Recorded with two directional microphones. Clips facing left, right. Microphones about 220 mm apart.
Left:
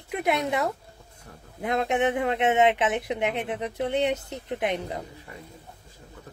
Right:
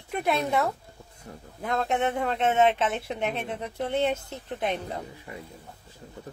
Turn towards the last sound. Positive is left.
turn(degrees=15)  # may be behind; listen again after turning